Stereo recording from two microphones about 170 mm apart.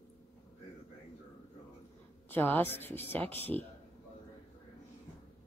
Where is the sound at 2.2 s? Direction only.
10° left (ahead or behind).